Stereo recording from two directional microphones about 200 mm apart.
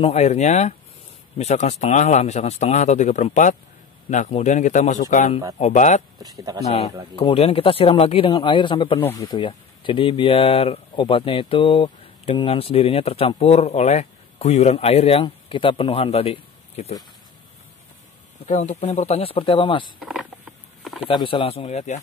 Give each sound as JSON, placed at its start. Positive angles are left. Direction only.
{"t": 0.0, "sound": "a man's voice", "side_deg": 35}
{"t": 18.4, "sound": "speech", "side_deg": 35}
{"t": 20.0, "sound": "speech", "side_deg": 0}
{"t": 20.8, "sound": "a sound", "side_deg": 0}
{"t": 21.1, "sound": "speech", "side_deg": 25}